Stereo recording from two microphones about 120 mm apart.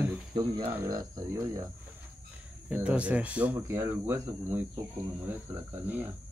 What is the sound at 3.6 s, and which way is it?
Speech, 20° right (ahead or behind).